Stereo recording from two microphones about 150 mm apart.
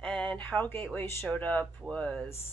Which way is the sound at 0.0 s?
5° left (ahead or behind).